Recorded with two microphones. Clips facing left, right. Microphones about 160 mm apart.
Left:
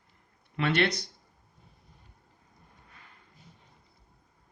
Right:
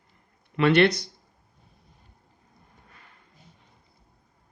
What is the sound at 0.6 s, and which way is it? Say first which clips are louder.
Speech: right 8 dB; 75° right (ahead or behind).